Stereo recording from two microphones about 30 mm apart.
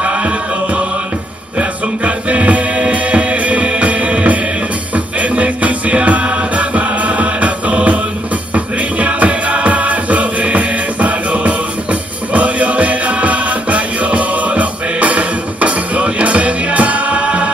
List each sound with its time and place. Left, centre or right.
0.0 s music: right
1.6 s music: right